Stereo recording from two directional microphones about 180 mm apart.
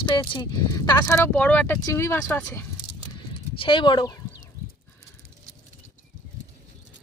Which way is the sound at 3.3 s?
30° left (ahead or behind).